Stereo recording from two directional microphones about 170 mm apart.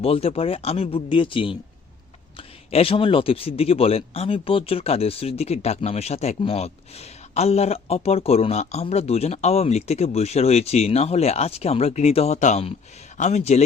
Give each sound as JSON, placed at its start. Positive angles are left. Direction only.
{"t": 0.0, "sound": "speech", "side_deg": 35}
{"t": 2.7, "sound": "speech", "side_deg": 35}